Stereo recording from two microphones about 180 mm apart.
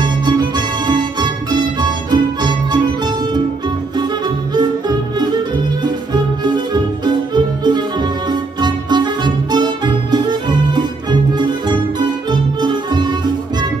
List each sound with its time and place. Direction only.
0.0 s music: 25° right (ahead or behind)
4.6 s music: 25° right (ahead or behind)
6.4 s music: 25° right (ahead or behind)